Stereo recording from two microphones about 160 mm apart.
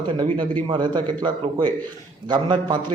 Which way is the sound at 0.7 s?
25° right (ahead or behind).